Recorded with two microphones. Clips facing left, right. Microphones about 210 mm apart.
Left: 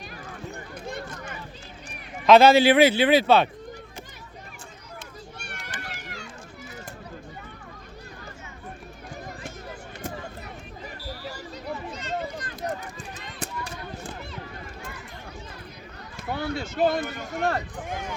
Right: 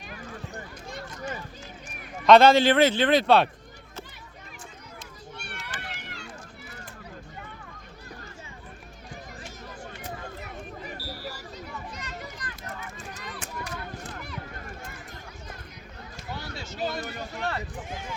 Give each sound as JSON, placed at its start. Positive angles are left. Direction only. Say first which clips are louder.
{"t": 0.9, "sound": "a sound", "louder": "left 3 dB", "side_deg": 55}
{"t": 2.2, "sound": "a man's voice", "louder": "left 1 dB", "side_deg": 5}
{"t": 5.8, "sound": "run", "louder": "left 2 dB", "side_deg": 45}
{"t": 11.9, "sound": "run", "louder": "left 8 dB", "side_deg": 25}
{"t": 16.2, "sound": "a sound", "louder": "left 9 dB", "side_deg": 55}
{"t": 17.3, "sound": "run", "louder": "left 7 dB", "side_deg": 50}